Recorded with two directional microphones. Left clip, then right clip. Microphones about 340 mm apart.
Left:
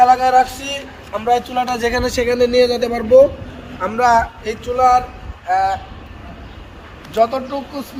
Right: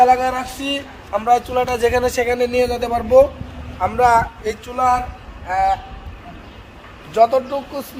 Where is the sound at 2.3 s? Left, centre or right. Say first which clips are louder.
Left 4 dB; right.